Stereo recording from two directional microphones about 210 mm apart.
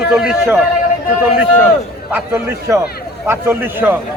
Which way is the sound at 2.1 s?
15° right (ahead or behind).